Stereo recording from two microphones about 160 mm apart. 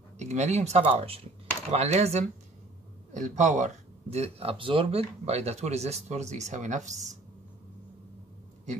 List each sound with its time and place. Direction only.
0.2 s speech: 45° right (ahead or behind)